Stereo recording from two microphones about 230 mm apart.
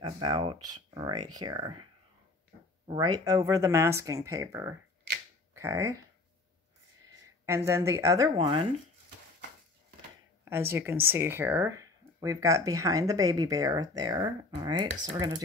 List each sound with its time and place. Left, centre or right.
0.0 s speech: centre
2.9 s speech: centre
7.4 s speech: centre
10.4 s speech: centre